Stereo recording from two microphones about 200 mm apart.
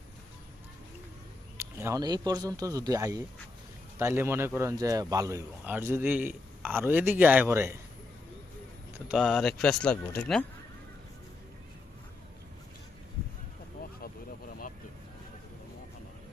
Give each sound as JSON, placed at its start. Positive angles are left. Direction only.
{"t": 1.5, "sound": "speech", "side_deg": -15}
{"t": 9.0, "sound": "speech", "side_deg": 0}
{"t": 14.0, "sound": "vehicle", "side_deg": 45}